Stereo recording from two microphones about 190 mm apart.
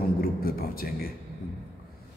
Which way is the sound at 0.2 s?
50° left (ahead or behind).